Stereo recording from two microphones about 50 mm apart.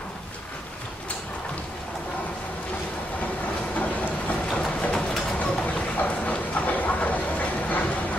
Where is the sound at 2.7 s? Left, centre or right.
Left.